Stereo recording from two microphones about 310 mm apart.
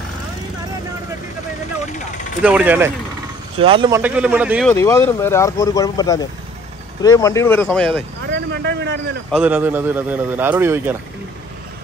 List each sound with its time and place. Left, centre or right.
2.4 s speech: centre
3.5 s speech: centre
4.7 s speech: centre
8.3 s speech: right
9.3 s speech: centre